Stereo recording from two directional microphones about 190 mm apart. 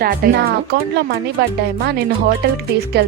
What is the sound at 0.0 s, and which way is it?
Speech, 50° right (ahead or behind).